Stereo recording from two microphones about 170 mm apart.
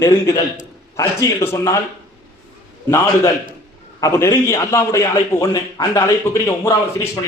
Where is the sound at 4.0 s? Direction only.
15° left (ahead or behind).